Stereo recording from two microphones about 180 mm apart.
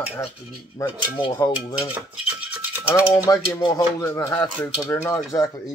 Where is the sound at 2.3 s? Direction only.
10° right (ahead or behind).